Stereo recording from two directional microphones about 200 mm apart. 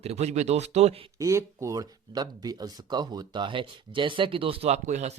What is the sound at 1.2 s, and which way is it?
Speech, 15° right (ahead or behind).